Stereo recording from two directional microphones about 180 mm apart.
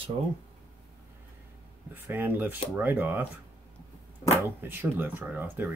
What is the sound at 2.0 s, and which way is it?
Speech, 10° right (ahead or behind).